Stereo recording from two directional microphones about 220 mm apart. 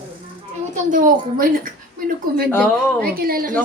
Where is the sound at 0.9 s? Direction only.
40° right (ahead or behind).